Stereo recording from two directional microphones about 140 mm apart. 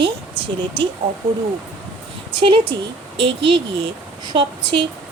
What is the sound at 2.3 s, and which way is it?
Speech, 35° right (ahead or behind).